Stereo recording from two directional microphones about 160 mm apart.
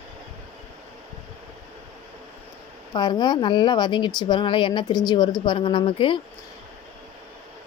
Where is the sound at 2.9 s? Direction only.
25° left (ahead or behind).